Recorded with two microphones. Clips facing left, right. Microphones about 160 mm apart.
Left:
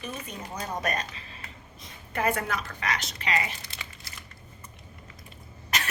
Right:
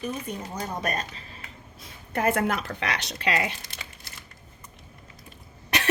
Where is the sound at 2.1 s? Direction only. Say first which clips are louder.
Right 4 dB; 50° right (ahead or behind); by 3.5 s 65° right (ahead or behind).